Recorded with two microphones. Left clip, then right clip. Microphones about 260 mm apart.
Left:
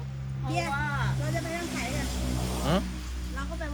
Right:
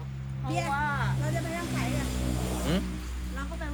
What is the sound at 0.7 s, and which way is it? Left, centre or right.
Vehicle, right.